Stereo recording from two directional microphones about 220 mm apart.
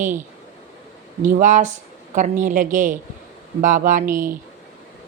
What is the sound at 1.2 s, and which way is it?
A woman's voice, 35° right (ahead or behind).